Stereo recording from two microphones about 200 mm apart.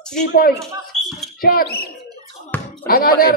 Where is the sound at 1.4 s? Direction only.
45° left (ahead or behind).